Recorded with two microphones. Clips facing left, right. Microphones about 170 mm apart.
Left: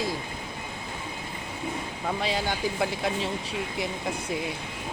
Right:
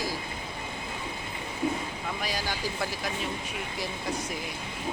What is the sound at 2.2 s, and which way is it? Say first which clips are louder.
Speech: left 5 dB; 25° left (ahead or behind).